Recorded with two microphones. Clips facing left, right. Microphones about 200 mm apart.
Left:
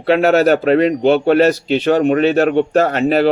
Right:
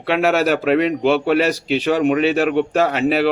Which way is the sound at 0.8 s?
40° left (ahead or behind).